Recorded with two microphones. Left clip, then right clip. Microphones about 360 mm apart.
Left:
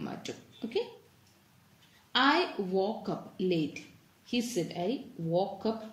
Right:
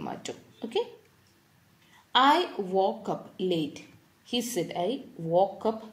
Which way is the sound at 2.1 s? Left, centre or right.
Centre.